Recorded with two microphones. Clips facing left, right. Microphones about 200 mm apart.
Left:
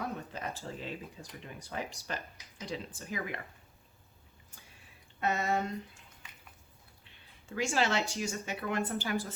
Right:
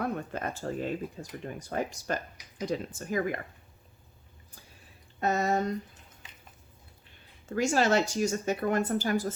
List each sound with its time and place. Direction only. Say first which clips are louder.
0.0 s speech: right 6 dB; 55° right (ahead or behind)
5.2 s speech: right 4 dB; 40° right (ahead or behind)
7.4 s speech: right 5 dB; 40° right (ahead or behind)